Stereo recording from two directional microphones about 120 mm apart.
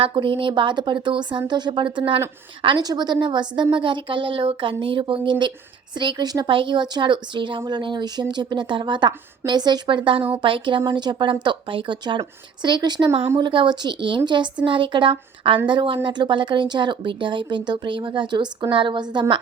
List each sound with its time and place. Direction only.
0.0 s a woman's voice: 45° right (ahead or behind)